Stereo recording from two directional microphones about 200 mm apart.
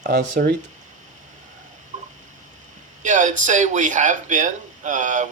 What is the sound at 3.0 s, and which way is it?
Speech, 40° right (ahead or behind).